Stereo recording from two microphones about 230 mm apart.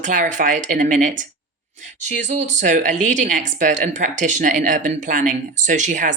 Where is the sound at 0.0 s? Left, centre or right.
Right.